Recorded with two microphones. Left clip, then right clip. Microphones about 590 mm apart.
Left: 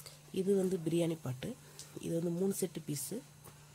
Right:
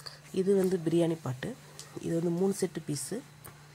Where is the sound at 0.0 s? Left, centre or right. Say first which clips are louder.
Right 6 dB; left.